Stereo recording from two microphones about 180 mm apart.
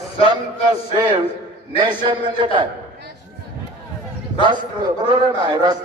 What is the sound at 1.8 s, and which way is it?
Speech, 25° right (ahead or behind).